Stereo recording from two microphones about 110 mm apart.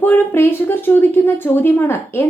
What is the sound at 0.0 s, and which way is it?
Speech, 20° left (ahead or behind).